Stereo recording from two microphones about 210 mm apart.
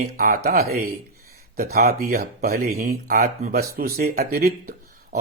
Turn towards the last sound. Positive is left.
turn(degrees=-45)  # may be behind; listen again after turning